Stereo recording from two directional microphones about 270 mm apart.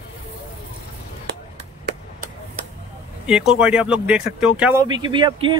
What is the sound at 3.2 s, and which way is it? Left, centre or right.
Speech, centre.